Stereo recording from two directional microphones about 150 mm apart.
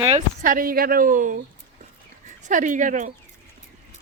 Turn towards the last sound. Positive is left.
turn(degrees=-60)  # may be behind; listen again after turning